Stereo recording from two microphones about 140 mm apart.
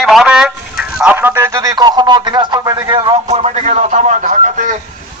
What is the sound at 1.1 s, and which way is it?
Speech, 20° right (ahead or behind).